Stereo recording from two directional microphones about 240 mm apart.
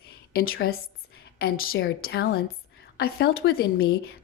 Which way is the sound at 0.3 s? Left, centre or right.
Left.